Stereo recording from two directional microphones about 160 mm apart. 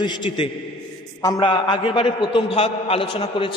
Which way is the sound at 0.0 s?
30° left (ahead or behind).